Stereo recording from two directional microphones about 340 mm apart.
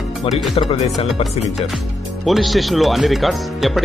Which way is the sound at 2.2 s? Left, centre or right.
Centre.